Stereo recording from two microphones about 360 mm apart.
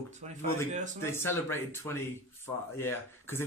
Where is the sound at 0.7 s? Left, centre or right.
Centre.